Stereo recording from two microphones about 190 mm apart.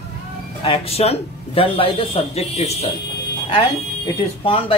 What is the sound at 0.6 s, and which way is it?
A man's voice, 30° left (ahead or behind).